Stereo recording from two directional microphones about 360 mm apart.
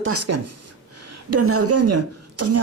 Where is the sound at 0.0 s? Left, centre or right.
Right.